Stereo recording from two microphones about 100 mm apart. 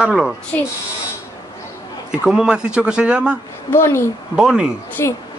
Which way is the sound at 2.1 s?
5° right (ahead or behind).